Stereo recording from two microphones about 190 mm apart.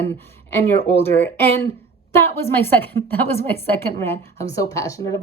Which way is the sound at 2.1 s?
10° left (ahead or behind).